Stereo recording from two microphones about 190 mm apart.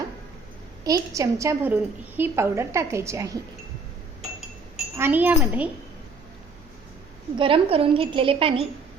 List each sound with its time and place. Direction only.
0.9 s a woman's voice: 15° right (ahead or behind)
4.9 s a woman's voice: 10° right (ahead or behind)
7.3 s a woman's voice: 25° right (ahead or behind)